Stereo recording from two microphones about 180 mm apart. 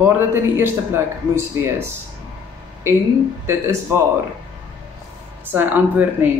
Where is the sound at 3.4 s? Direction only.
15° right (ahead or behind).